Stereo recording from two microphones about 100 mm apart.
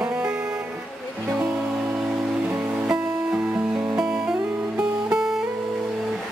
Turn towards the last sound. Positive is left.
turn(degrees=-10)  # may be behind; listen again after turning